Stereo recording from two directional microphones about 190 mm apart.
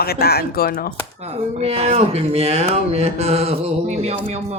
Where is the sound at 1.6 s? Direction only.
35° right (ahead or behind).